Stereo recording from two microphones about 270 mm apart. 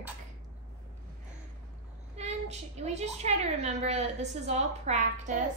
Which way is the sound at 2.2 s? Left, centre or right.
Right.